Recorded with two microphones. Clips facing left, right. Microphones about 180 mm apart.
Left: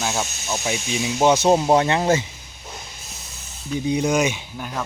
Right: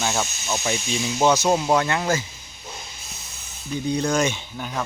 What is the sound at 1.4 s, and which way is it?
Speech, 30° left (ahead or behind).